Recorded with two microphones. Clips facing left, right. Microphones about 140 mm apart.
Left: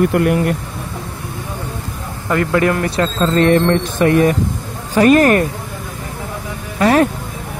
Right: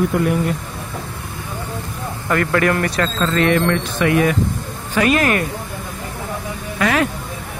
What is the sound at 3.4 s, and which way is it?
Speech, 35° left (ahead or behind).